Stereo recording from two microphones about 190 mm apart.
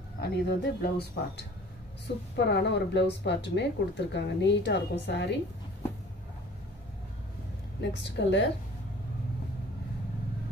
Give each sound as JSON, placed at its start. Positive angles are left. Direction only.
{"t": 0.2, "sound": "speech", "side_deg": 60}
{"t": 8.0, "sound": "speech", "side_deg": 65}